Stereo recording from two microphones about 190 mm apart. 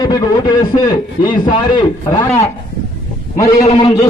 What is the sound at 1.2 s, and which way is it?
Speech, 45° left (ahead or behind).